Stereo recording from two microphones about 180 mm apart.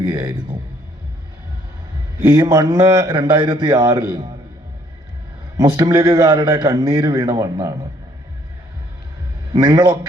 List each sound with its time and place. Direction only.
2.3 s a man's voice: 20° right (ahead or behind)
5.5 s a man's voice: 20° right (ahead or behind)
9.5 s a man's voice: 20° right (ahead or behind)